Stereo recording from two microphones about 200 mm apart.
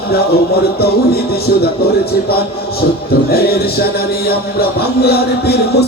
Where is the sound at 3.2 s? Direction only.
50° left (ahead or behind).